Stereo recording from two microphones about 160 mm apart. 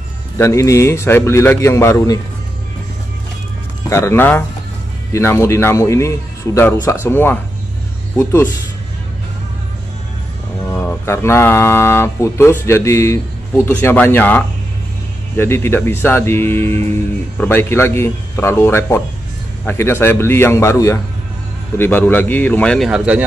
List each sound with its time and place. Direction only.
0.4 s speech: 20° left (ahead or behind)
3.9 s speech: 15° left (ahead or behind)
10.7 s speech: 15° left (ahead or behind)
22.8 s speech: 5° right (ahead or behind)